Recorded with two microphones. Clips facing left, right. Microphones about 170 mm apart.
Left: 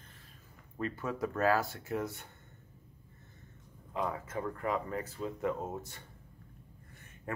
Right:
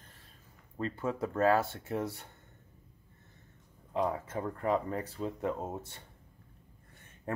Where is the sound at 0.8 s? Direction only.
30° right (ahead or behind).